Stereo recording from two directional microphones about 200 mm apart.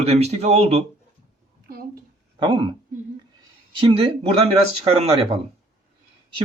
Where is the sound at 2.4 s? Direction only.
25° right (ahead or behind).